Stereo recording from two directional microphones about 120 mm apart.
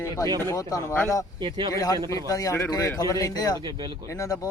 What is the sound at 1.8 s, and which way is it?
Speech, 30° left (ahead or behind).